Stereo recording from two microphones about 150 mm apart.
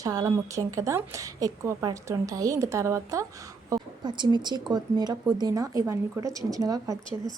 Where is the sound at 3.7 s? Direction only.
30° right (ahead or behind).